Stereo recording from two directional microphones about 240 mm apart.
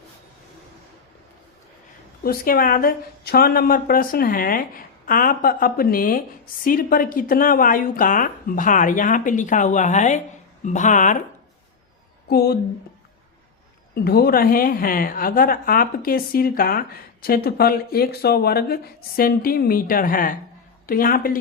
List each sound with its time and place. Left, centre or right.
2.2 s a woman's voice: left
12.3 s a woman's voice: left
13.9 s a woman's voice: left